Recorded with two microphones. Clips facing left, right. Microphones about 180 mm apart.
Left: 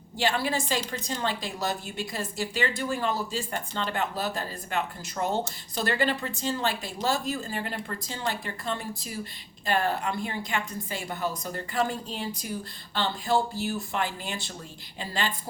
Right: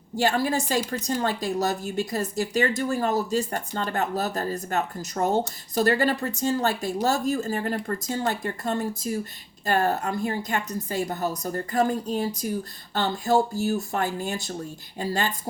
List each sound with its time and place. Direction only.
0.2 s a woman's voice: 45° right (ahead or behind)